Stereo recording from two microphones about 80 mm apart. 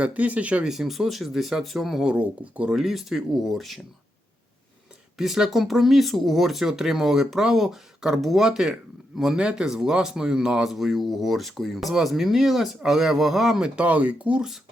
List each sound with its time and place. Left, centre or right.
0.0 s speech: centre
0.7 s speech: centre
2.7 s speech: centre
5.1 s speech: centre
13.7 s speech: centre